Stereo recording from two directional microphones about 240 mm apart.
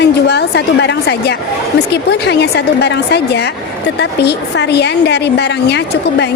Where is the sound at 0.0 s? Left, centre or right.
Left.